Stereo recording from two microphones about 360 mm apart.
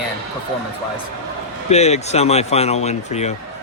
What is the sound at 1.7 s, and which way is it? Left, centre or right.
Speech, centre.